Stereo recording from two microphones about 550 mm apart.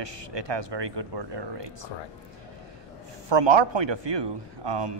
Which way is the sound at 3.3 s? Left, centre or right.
Right.